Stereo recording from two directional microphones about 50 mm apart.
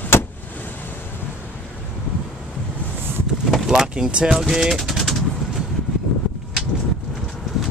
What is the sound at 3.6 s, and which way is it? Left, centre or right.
Vehicle, centre.